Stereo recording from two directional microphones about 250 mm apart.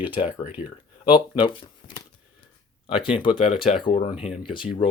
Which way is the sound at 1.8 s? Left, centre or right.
Centre.